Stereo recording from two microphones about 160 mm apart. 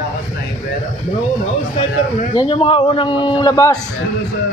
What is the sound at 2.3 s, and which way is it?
A man's voice, 35° left (ahead or behind).